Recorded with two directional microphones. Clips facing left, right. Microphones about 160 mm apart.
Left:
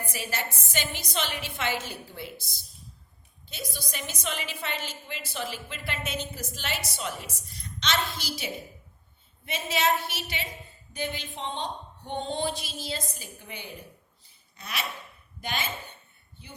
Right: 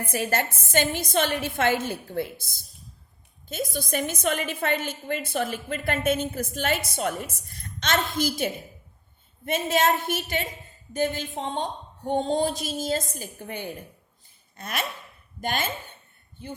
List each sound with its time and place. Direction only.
0.0 s a woman's voice: 50° right (ahead or behind)
14.5 s a sound: 50° right (ahead or behind)
15.4 s a woman's voice: 50° right (ahead or behind)